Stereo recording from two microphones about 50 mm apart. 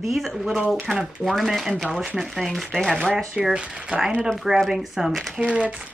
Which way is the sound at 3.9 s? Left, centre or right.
Right.